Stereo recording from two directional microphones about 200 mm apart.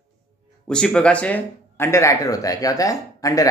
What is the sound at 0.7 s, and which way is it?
Speech, 5° left (ahead or behind).